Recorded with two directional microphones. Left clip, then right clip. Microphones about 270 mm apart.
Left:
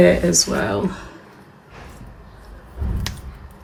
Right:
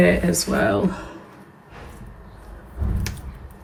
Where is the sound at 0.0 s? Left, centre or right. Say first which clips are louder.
Left 4 dB; centre.